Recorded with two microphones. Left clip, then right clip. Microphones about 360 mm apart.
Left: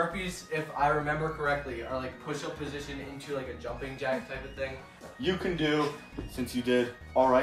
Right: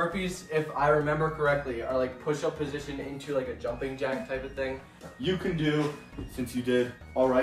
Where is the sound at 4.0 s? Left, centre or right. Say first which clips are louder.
Right 1 dB; centre.